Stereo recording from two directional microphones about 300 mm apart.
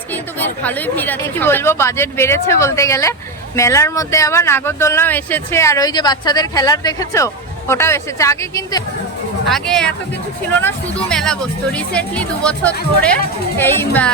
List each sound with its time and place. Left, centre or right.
0.1 s a woman's voice: centre